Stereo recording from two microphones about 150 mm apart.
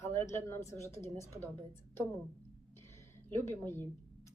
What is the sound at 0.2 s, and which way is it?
Speech, 20° left (ahead or behind).